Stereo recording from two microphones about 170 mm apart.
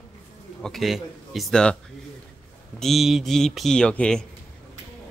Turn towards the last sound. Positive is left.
turn(degrees=5)  # may be behind; listen again after turning